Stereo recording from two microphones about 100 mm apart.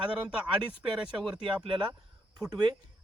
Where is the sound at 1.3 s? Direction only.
55° right (ahead or behind).